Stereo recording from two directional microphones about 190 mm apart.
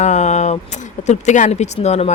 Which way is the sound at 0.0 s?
40° left (ahead or behind).